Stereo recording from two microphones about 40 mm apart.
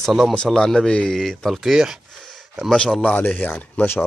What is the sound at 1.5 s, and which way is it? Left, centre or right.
Speech, centre.